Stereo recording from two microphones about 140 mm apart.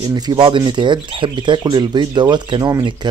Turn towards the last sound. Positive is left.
turn(degrees=-30)  # may be behind; listen again after turning